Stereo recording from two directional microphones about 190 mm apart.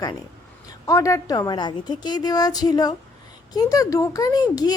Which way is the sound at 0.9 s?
15° left (ahead or behind).